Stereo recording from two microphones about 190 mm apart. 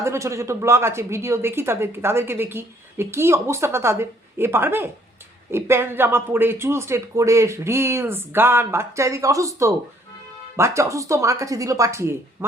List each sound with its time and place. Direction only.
0.0 s a woman's voice: 15° right (ahead or behind)